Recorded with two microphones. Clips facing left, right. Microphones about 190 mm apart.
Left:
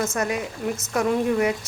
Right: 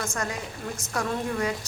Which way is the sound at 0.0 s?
20° left (ahead or behind).